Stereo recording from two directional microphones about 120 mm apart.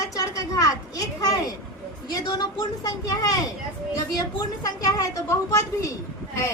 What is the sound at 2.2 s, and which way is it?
A woman's voice, 30° left (ahead or behind).